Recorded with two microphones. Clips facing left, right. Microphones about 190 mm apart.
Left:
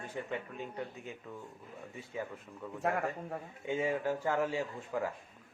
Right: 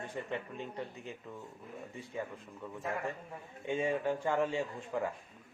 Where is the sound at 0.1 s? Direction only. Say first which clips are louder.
Even; 5° left (ahead or behind).